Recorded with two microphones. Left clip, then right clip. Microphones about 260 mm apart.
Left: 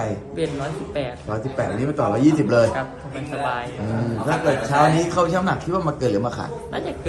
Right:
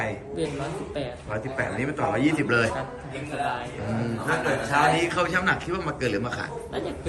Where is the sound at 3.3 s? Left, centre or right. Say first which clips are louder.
Left 4 dB; centre.